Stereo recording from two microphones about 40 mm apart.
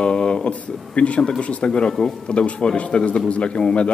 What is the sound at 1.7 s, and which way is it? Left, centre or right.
A man's voice, centre.